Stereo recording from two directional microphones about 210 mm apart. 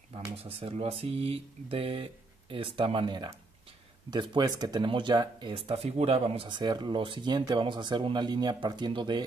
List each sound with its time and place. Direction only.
0.1 s speech: 25° right (ahead or behind)